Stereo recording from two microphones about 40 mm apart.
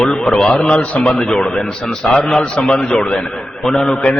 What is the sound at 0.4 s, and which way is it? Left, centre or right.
A man's voice, left.